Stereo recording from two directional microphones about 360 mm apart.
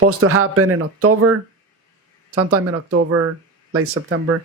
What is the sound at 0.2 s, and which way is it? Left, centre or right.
Speech, right.